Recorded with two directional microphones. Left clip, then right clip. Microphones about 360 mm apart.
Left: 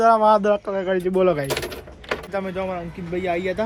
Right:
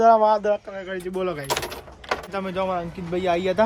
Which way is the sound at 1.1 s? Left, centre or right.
Left.